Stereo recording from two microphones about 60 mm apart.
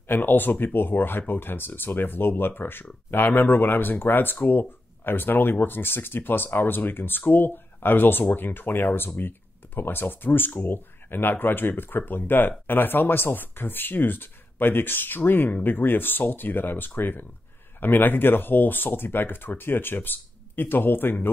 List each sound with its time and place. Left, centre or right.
0.1 s speech: left